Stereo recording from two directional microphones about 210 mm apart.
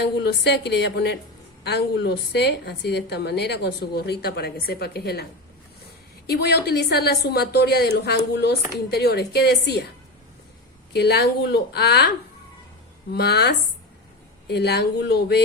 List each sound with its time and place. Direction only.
0.0 s a woman's voice: 50° left (ahead or behind)
10.9 s a woman's voice: 50° left (ahead or behind)
13.1 s a woman's voice: 50° left (ahead or behind)